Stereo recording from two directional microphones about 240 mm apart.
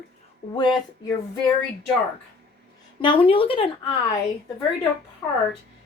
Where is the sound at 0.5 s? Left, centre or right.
Centre.